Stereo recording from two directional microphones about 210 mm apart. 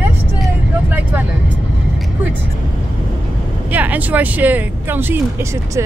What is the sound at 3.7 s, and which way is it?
Speech, 10° right (ahead or behind).